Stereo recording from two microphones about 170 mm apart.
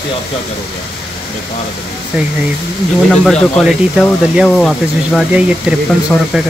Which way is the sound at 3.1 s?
5° left (ahead or behind).